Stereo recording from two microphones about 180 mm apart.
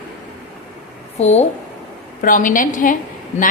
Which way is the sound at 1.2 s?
35° left (ahead or behind).